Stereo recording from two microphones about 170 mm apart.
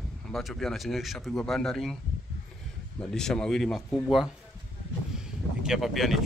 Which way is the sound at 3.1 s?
5° left (ahead or behind).